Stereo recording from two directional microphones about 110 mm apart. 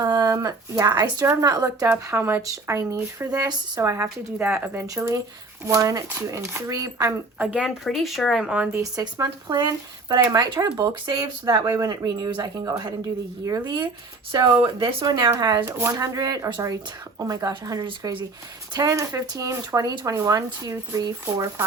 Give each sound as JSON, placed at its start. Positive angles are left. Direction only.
{"t": 0.0, "sound": "speech", "side_deg": -35}
{"t": 2.0, "sound": "speech", "side_deg": -20}
{"t": 7.3, "sound": "speech", "side_deg": -10}
{"t": 8.8, "sound": "speech", "side_deg": -30}